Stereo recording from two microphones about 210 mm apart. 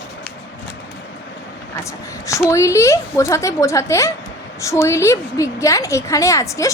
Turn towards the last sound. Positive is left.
turn(degrees=15)  # may be behind; listen again after turning